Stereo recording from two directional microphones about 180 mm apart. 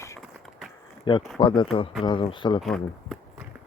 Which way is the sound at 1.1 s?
30° left (ahead or behind).